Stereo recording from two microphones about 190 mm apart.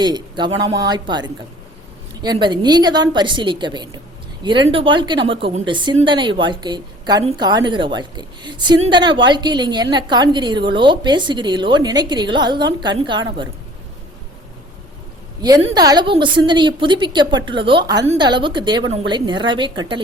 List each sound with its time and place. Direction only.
0.0 s a woman's voice: 25° right (ahead or behind)
15.4 s a woman's voice: 20° right (ahead or behind)